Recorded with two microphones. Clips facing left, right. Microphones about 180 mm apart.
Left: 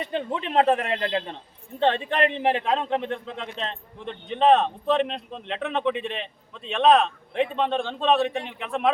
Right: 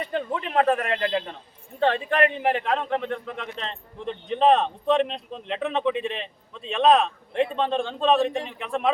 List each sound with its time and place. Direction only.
0.3 s a man's voice: 20° left (ahead or behind)
3.7 s a man's voice: centre (ahead or behind)